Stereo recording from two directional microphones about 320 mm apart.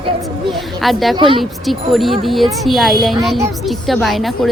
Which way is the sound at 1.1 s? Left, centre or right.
Centre.